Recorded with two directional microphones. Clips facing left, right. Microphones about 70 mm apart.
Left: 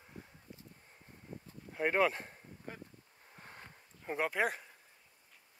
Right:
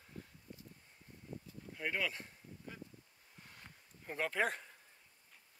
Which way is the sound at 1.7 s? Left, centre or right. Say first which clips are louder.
Left 9 dB; left.